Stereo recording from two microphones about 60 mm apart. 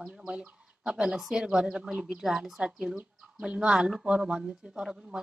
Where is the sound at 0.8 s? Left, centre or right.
Centre.